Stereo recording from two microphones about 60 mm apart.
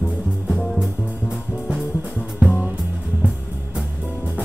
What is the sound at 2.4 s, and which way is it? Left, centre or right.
Music, right.